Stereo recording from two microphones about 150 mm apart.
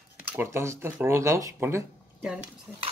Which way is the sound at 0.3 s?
15° right (ahead or behind).